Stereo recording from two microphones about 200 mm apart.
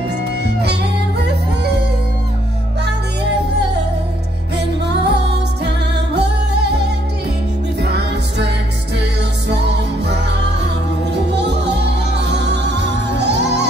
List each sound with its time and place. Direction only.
0.6 s music: 55° right (ahead or behind)
4.6 s music: 55° right (ahead or behind)
7.8 s music: 55° right (ahead or behind)
9.5 s music: 55° right (ahead or behind)